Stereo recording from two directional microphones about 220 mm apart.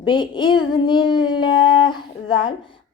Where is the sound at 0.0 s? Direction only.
20° left (ahead or behind).